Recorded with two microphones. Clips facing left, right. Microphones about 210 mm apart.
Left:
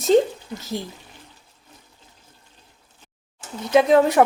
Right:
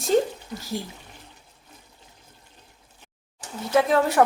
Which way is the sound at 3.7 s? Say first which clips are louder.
Left 4 dB; 20° left (ahead or behind).